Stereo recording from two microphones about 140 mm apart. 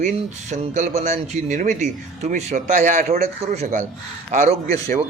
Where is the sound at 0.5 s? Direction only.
55° right (ahead or behind).